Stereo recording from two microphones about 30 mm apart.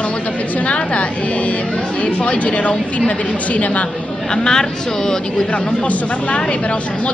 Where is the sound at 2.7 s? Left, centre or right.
Left.